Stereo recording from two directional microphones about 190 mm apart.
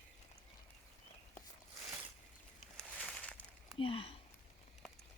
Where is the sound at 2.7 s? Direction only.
5° left (ahead or behind).